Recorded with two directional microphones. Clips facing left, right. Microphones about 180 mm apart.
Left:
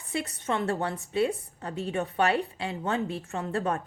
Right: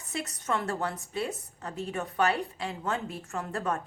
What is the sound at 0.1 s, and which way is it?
A woman's voice, 30° left (ahead or behind).